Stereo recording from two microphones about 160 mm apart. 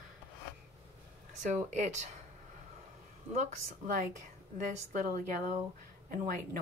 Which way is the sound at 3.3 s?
55° right (ahead or behind).